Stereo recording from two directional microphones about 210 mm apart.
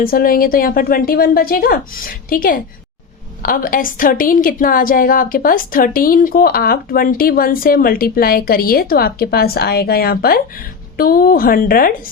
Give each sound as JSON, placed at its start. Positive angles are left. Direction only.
{"t": 0.0, "sound": "a woman's voice", "side_deg": 45}